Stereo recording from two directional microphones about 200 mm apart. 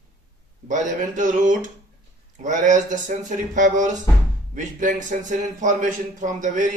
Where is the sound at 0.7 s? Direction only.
40° right (ahead or behind).